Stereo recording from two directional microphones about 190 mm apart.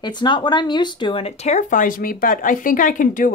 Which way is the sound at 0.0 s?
25° left (ahead or behind).